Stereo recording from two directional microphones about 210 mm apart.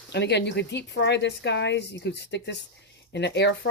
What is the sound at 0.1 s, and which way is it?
Speech, 55° left (ahead or behind).